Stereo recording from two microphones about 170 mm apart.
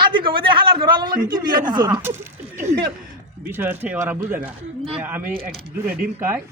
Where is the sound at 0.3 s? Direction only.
30° right (ahead or behind).